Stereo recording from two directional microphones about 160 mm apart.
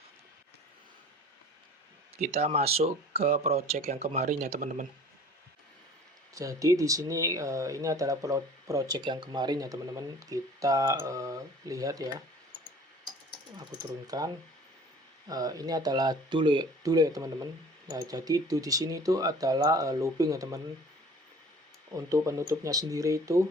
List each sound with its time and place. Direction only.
2.1 s speech: 40° right (ahead or behind)
6.3 s speech: 20° right (ahead or behind)
14.1 s speech: 25° right (ahead or behind)
15.3 s speech: 25° right (ahead or behind)
21.9 s speech: 20° right (ahead or behind)